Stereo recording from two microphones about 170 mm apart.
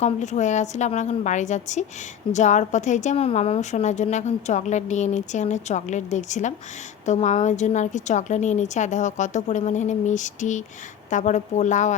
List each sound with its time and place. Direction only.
0.0 s a woman's voice: 45° left (ahead or behind)